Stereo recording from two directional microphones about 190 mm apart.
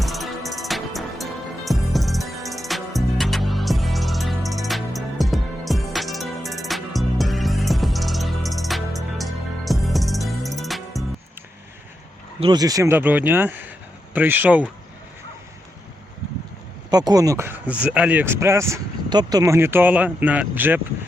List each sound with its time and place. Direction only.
0.0 s music: centre (ahead or behind)
12.4 s speech: 20° right (ahead or behind)
16.9 s speech: 20° right (ahead or behind)